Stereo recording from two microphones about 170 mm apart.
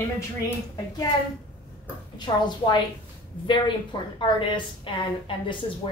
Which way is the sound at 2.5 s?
25° left (ahead or behind).